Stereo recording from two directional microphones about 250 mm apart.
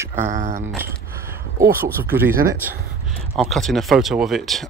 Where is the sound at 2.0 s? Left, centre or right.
Centre.